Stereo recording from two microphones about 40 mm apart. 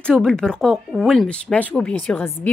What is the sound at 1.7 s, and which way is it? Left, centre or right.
Speech, left.